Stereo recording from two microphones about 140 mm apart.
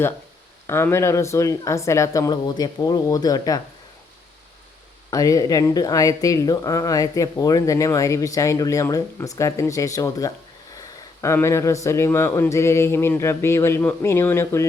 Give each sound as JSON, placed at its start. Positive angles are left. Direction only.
{"t": 0.7, "sound": "speech", "side_deg": 20}
{"t": 5.1, "sound": "speech", "side_deg": 25}